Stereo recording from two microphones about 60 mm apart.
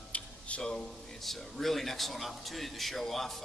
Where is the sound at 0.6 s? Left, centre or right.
Centre.